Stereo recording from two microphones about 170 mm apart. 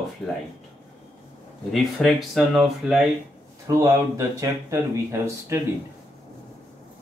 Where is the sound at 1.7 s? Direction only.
Centre (ahead or behind).